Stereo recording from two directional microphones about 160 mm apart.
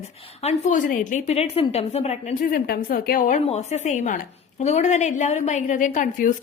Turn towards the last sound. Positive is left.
turn(degrees=55)  # may be behind; listen again after turning